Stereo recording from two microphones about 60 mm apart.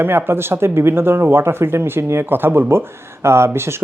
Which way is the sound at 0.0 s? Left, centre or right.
Right.